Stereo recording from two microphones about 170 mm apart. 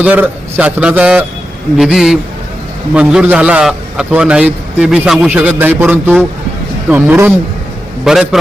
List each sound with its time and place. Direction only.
0.0 s a man's voice: 10° right (ahead or behind)